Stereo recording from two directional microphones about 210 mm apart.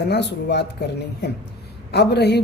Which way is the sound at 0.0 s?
55° left (ahead or behind).